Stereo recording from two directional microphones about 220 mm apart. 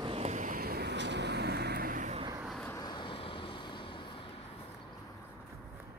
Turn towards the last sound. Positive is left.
turn(degrees=20)  # may be behind; listen again after turning